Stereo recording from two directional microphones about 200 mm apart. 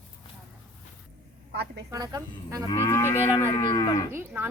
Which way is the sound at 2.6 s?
15° left (ahead or behind).